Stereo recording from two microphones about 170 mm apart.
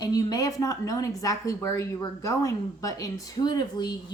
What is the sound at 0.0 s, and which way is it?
Speech, 20° left (ahead or behind).